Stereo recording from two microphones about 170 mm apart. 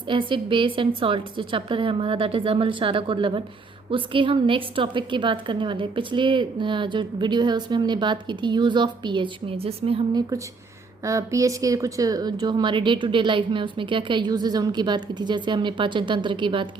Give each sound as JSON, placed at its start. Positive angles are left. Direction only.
{"t": 0.1, "sound": "a woman's voice", "side_deg": -30}
{"t": 11.0, "sound": "a woman's voice", "side_deg": -20}